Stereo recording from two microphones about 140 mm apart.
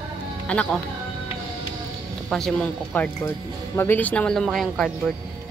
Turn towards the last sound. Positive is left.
turn(degrees=0)  # may be behind; listen again after turning